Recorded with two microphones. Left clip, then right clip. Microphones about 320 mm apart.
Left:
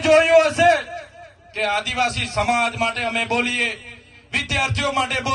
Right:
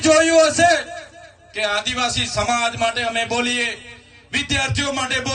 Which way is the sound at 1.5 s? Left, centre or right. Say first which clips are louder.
Even; centre.